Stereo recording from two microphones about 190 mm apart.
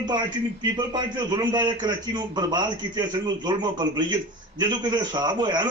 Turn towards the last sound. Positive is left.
turn(degrees=-25)  # may be behind; listen again after turning